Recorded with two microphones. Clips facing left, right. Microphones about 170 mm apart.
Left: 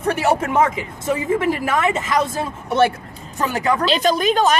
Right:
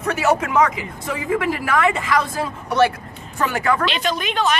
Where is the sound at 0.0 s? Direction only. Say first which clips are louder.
Left 1 dB; 30° left (ahead or behind).